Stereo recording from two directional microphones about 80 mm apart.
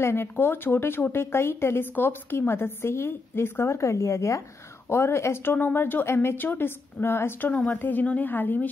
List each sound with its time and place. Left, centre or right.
0.0 s speech: left
7.5 s a woman's voice: centre